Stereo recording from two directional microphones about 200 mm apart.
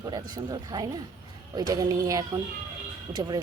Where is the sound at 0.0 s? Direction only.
20° right (ahead or behind).